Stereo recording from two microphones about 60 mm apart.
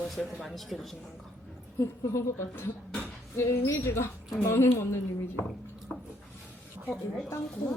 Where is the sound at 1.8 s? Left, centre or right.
Left.